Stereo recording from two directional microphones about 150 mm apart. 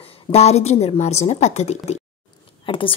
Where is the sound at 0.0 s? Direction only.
45° left (ahead or behind).